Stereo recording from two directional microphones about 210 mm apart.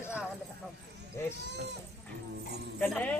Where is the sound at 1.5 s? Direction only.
55° right (ahead or behind).